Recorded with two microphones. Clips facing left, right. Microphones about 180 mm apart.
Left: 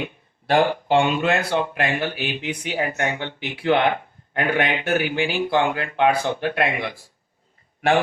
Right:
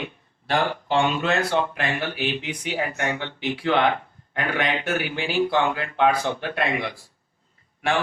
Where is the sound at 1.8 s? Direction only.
55° left (ahead or behind).